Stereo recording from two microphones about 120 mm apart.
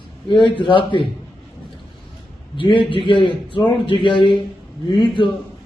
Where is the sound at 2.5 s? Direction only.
45° left (ahead or behind).